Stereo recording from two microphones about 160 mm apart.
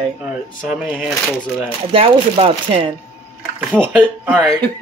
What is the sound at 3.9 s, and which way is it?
Speech, 5° right (ahead or behind).